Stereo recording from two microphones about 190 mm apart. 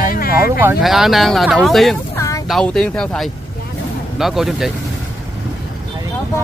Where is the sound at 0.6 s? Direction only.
5° right (ahead or behind).